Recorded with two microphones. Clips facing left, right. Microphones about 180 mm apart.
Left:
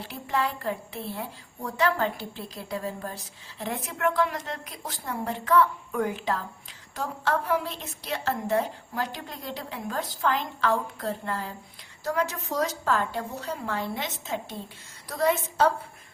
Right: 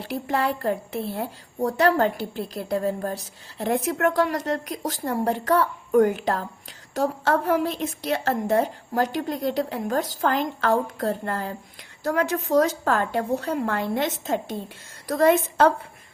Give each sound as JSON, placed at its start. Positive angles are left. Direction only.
{"t": 0.6, "sound": "a woman's voice", "side_deg": -50}